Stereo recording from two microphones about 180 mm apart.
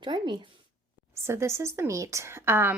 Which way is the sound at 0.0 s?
25° right (ahead or behind).